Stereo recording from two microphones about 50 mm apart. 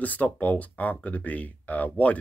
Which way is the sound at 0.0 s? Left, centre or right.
Left.